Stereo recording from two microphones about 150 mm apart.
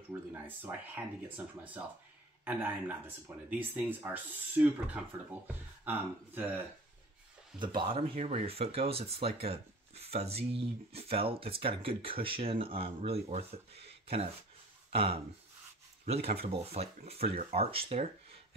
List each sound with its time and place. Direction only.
0.3 s speech: 15° right (ahead or behind)
3.4 s speech: 10° right (ahead or behind)
7.5 s speech: 30° right (ahead or behind)